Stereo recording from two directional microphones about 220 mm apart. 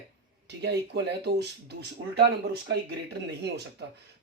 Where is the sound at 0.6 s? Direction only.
50° right (ahead or behind).